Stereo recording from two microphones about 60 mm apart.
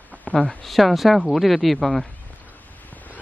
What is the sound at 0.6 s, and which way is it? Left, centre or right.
Speech, centre.